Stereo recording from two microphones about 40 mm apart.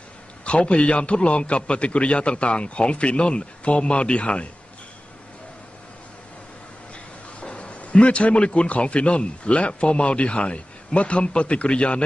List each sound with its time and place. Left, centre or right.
0.5 s a man's voice: left
7.3 s a man's voice: left